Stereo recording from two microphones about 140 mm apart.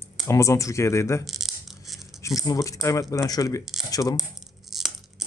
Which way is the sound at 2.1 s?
25° left (ahead or behind).